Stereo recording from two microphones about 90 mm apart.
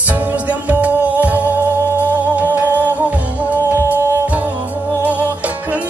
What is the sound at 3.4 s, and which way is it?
Music, 25° left (ahead or behind).